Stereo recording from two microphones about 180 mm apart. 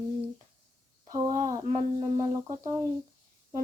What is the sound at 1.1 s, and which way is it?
Speech, 20° right (ahead or behind).